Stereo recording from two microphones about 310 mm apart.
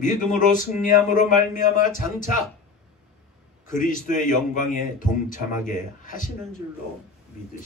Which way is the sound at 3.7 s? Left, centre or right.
Left.